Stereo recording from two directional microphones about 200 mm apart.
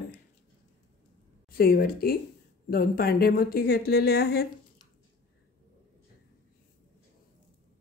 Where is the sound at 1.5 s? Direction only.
45° left (ahead or behind).